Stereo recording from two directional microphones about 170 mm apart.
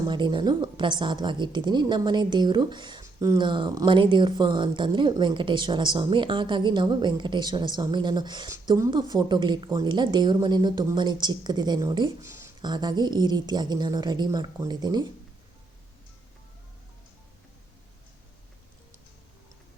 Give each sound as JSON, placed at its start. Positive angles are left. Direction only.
{"t": 0.1, "sound": "a woman's voice", "side_deg": -25}